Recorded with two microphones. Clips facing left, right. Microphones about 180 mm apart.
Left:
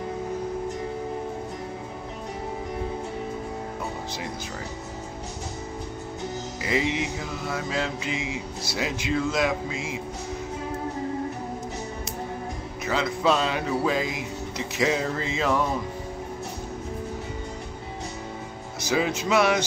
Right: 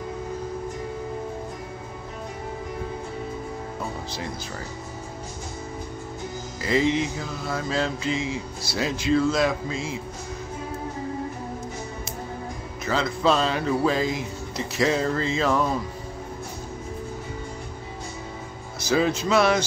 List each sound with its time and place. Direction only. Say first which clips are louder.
6.6 s mantra: right 4 dB; 15° left (ahead or behind)
12.8 s mantra: right 1 dB; 15° left (ahead or behind)
18.8 s mantra: right 3 dB; 15° left (ahead or behind)